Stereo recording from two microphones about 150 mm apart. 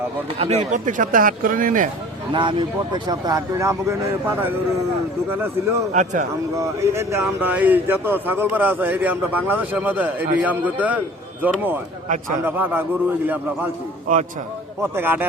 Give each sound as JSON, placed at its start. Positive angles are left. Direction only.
{"t": 0.3, "sound": "a man's voice", "side_deg": -45}
{"t": 2.3, "sound": "speech", "side_deg": -35}
{"t": 5.9, "sound": "speech", "side_deg": -55}
{"t": 6.6, "sound": "a man's voice", "side_deg": -15}
{"t": 14.8, "sound": "a man's voice", "side_deg": -15}